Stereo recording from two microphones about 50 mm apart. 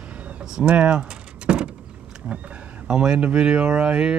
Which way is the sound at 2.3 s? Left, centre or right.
Right.